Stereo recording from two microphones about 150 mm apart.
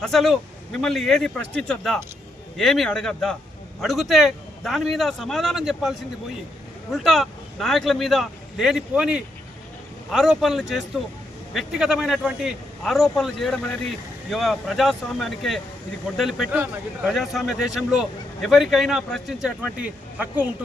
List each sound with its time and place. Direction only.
0.0 s speech: centre (ahead or behind)
6.9 s speech: centre (ahead or behind)